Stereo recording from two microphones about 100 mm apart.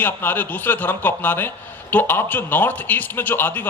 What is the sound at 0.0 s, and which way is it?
A man's voice, 20° left (ahead or behind).